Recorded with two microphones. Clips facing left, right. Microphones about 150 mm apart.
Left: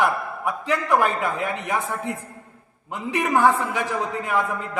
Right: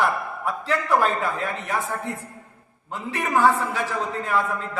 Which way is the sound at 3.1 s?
15° left (ahead or behind).